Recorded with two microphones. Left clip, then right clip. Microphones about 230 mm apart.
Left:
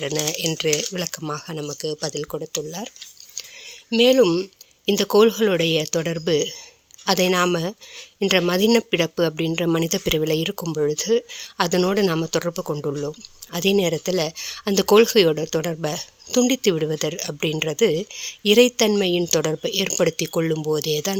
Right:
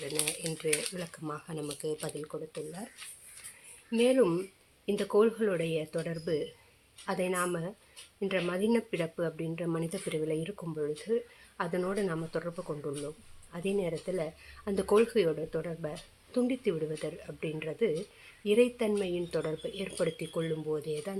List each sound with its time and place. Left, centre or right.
0.0 s speech: left
3.9 s speech: left